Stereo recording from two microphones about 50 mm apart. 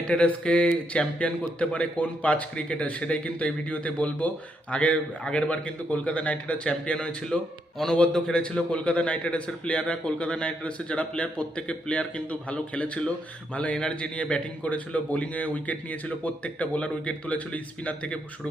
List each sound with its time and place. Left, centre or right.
0.0 s a man's voice: left
8.1 s a man's voice: centre